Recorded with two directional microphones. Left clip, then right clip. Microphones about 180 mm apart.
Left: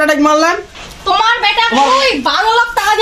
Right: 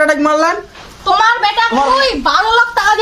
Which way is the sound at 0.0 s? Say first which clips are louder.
Left 1 dB; 15° right (ahead or behind).